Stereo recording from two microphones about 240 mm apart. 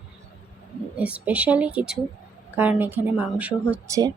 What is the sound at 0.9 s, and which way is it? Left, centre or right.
Speech, centre.